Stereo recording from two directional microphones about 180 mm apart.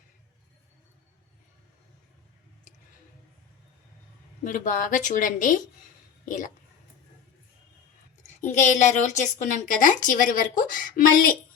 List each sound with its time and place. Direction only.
4.4 s a woman's voice: 45° left (ahead or behind)
8.4 s a woman's voice: 40° left (ahead or behind)